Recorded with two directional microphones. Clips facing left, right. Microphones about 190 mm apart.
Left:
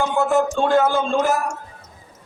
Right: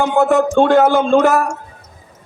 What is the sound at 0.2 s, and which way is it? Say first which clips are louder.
A man's voice: right 7 dB; 75° right (ahead or behind).